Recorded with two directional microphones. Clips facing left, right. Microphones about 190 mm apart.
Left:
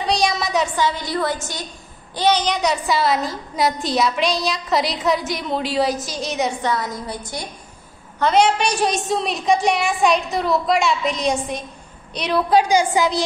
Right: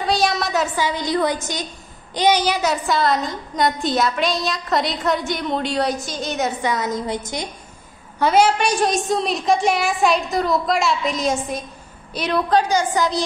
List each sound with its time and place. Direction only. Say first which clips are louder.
0.0 s a woman's voice: even; centre (ahead or behind)
0.8 s a woman's voice: right 2 dB; 15° right (ahead or behind); by 6.7 s centre (ahead or behind)
6.7 s a woman's voice: right 2 dB; 20° right (ahead or behind)
8.2 s a woman's voice: even; 5° right (ahead or behind)
12.4 s a woman's voice: left 3 dB; 10° left (ahead or behind)